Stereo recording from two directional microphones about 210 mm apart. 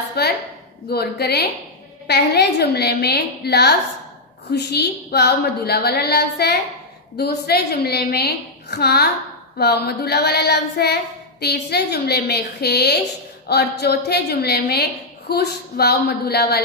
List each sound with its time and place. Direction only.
0.2 s a woman's voice: 50° left (ahead or behind)
0.8 s child singing: 50° left (ahead or behind)